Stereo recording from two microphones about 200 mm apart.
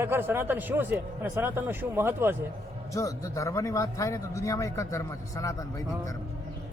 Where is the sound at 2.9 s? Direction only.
15° left (ahead or behind).